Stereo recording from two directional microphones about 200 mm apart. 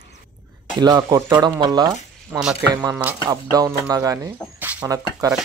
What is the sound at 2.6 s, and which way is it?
Speech, 15° right (ahead or behind).